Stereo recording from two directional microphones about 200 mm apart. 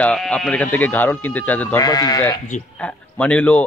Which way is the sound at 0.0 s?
5° left (ahead or behind).